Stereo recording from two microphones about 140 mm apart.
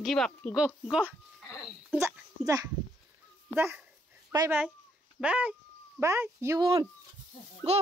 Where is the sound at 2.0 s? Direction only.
25° right (ahead or behind).